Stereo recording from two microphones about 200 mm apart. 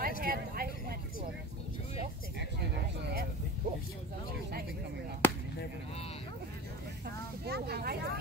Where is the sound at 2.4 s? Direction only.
55° right (ahead or behind).